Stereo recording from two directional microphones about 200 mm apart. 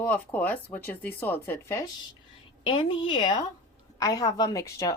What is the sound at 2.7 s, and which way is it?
Speech, 25° left (ahead or behind).